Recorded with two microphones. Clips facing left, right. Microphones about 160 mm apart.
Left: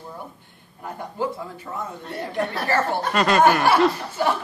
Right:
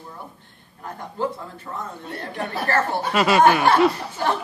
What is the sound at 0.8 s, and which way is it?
Speech, 10° left (ahead or behind).